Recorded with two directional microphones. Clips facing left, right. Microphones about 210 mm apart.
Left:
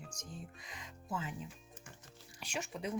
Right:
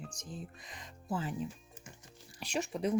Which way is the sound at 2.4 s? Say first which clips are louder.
Right 7 dB; 35° right (ahead or behind).